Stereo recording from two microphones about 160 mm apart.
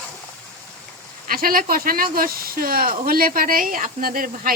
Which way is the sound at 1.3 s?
65° right (ahead or behind).